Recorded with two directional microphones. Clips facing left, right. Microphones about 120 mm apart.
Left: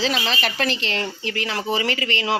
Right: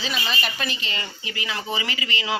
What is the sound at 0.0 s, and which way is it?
Speech, 90° left.